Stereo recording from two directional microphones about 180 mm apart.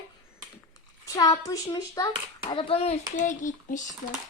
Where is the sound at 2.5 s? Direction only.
30° left (ahead or behind).